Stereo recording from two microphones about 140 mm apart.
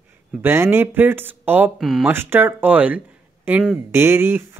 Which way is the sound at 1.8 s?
Centre (ahead or behind).